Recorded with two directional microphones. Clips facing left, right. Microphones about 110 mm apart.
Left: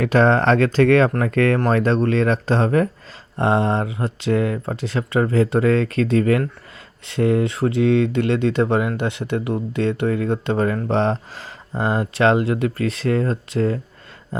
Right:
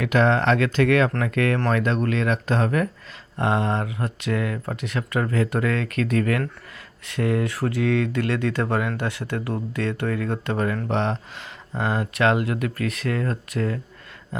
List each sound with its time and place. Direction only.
0.0 s speech: 35° left (ahead or behind)